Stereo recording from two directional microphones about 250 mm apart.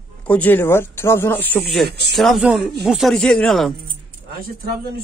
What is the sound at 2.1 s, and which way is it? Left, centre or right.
Speech, centre.